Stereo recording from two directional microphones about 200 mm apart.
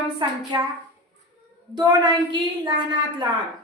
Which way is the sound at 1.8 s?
20° right (ahead or behind).